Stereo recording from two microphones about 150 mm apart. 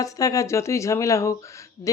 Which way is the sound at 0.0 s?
20° left (ahead or behind).